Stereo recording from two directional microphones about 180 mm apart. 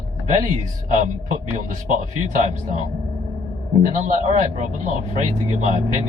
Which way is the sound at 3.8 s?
45° right (ahead or behind).